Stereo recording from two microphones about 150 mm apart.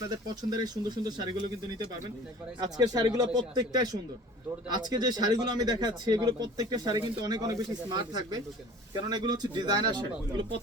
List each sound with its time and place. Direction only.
0.1 s speech: 25° right (ahead or behind)
2.6 s speech: 25° right (ahead or behind)